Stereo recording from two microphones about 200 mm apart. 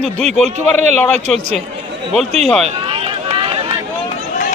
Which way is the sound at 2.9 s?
30° right (ahead or behind).